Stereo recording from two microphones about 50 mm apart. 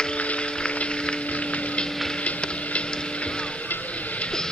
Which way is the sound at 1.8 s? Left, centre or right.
Left.